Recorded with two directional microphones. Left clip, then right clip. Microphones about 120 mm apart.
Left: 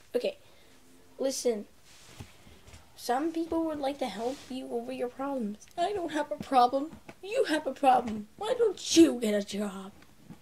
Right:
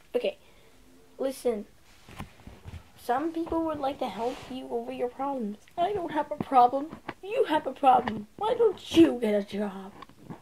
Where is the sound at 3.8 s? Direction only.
20° left (ahead or behind).